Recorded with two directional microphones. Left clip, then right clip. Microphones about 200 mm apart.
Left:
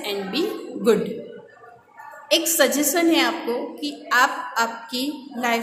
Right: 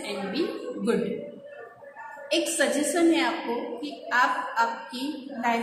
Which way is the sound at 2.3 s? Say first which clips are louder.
Left 6 dB; 50° left (ahead or behind).